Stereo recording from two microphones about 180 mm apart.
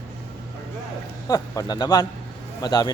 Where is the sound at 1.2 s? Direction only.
20° left (ahead or behind).